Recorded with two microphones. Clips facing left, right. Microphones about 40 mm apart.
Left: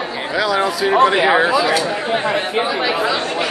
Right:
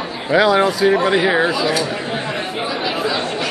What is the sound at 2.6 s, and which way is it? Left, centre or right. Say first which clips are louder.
Speech: left 3 dB; left.